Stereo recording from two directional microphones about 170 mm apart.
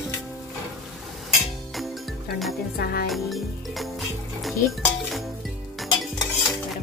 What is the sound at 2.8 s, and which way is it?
Music, 60° left (ahead or behind).